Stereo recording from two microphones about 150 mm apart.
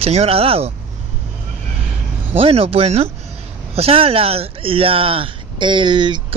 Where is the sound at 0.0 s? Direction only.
40° right (ahead or behind).